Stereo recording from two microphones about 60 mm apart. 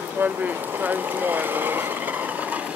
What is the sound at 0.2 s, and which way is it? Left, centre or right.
Speech, right.